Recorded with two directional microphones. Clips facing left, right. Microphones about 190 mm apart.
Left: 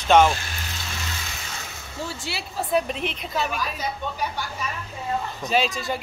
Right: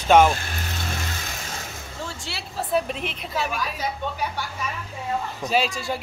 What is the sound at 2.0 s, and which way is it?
A woman's voice, 5° left (ahead or behind).